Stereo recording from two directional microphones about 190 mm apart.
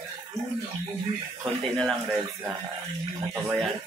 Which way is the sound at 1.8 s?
Centre (ahead or behind).